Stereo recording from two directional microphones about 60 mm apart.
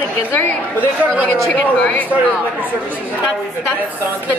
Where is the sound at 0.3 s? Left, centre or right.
Left.